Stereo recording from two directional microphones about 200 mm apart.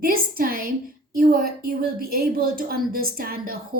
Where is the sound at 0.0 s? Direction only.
45° right (ahead or behind).